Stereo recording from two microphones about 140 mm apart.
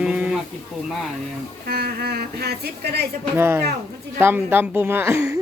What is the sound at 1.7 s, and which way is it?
Speech, 90° right.